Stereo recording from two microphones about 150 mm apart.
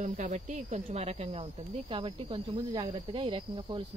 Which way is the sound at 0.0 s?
55° right (ahead or behind).